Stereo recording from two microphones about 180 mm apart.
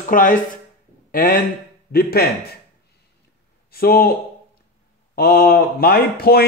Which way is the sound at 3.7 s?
55° left (ahead or behind).